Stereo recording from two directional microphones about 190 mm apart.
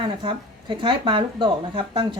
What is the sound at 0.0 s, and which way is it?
Speech, 25° right (ahead or behind).